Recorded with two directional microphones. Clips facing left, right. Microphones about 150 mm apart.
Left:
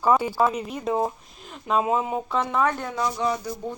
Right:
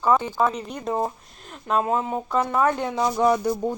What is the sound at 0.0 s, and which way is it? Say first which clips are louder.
Speech: even; 10° left (ahead or behind).